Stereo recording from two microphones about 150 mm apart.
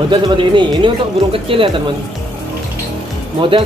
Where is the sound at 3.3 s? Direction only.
35° right (ahead or behind).